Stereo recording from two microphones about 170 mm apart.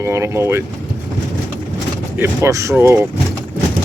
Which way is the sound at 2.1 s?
15° right (ahead or behind).